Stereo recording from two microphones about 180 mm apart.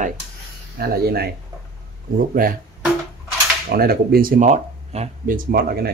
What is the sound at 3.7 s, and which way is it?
Speech, 55° right (ahead or behind).